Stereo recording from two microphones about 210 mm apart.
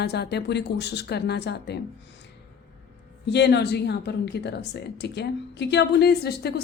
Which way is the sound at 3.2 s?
55° left (ahead or behind).